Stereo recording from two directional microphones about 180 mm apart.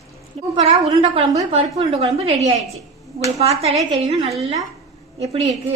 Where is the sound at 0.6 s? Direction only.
35° right (ahead or behind).